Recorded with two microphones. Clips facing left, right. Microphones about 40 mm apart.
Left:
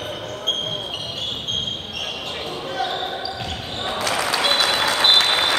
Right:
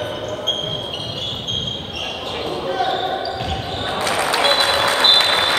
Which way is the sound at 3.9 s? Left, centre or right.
Right.